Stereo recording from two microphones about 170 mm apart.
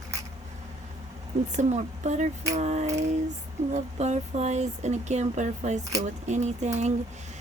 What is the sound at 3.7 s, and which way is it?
Speech, 40° right (ahead or behind).